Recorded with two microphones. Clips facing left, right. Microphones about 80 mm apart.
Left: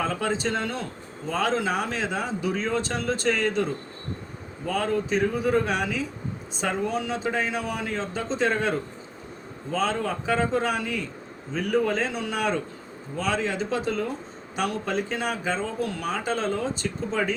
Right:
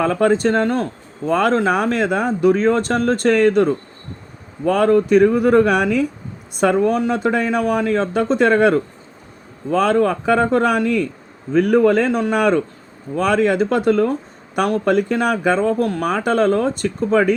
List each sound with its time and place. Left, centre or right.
0.0 s speech: right